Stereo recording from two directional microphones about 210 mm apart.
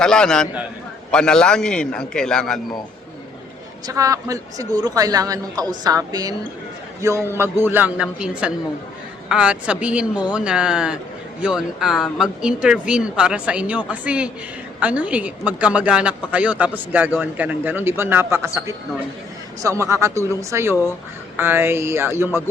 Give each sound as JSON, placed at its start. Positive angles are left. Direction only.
{"t": 0.0, "sound": "speech", "side_deg": 5}
{"t": 3.8, "sound": "speech", "side_deg": -15}